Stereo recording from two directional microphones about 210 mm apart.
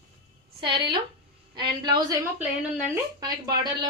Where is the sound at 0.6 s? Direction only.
20° right (ahead or behind).